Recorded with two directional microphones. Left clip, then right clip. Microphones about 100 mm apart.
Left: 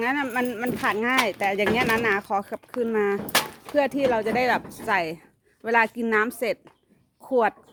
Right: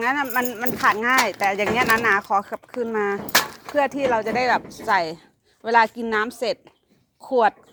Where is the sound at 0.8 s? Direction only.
45° left (ahead or behind).